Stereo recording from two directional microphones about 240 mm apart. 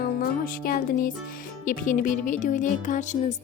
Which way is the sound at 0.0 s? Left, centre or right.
Left.